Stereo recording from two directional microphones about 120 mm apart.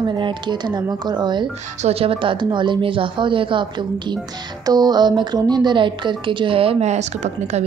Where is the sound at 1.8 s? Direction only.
60° right (ahead or behind).